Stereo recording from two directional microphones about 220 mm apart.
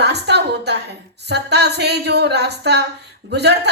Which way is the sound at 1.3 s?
50° right (ahead or behind).